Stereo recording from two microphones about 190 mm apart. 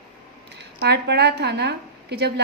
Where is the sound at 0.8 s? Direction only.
60° right (ahead or behind).